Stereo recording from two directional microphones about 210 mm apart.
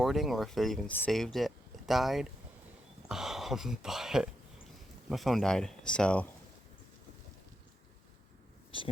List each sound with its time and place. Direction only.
0.0 s speech: centre (ahead or behind)
8.7 s speech: 25° left (ahead or behind)